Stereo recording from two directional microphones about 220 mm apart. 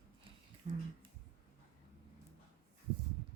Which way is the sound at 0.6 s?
35° right (ahead or behind).